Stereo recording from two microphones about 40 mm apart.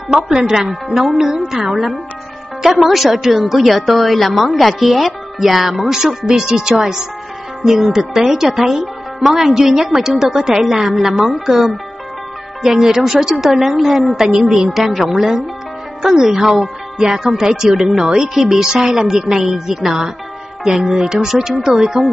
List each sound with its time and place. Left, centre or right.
0.1 s a woman's voice: centre
14.1 s a woman's voice: centre
14.8 s a woman's voice: centre
15.0 s a woman's voice: centre